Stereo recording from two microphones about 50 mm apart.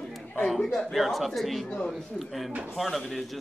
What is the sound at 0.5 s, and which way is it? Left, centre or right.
Speech, centre.